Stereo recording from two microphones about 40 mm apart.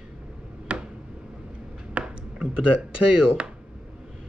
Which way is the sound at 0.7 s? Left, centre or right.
Right.